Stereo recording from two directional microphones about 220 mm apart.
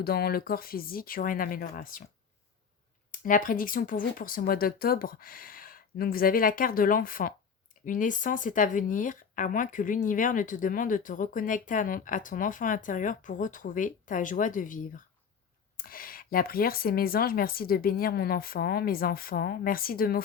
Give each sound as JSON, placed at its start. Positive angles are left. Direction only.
{"t": 0.0, "sound": "speech", "side_deg": 45}
{"t": 3.1, "sound": "speech", "side_deg": 40}